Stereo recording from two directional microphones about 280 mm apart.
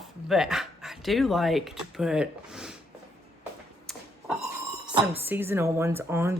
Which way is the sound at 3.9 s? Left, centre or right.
Centre.